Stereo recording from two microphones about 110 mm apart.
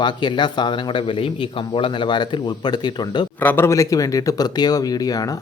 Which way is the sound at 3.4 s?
20° left (ahead or behind).